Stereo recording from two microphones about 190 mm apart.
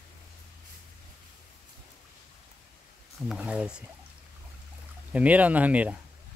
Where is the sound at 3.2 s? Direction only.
5° right (ahead or behind).